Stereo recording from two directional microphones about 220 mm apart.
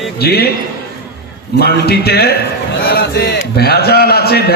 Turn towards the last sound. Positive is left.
turn(degrees=45)  # may be behind; listen again after turning